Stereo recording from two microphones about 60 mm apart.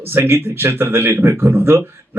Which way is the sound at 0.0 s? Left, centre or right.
Right.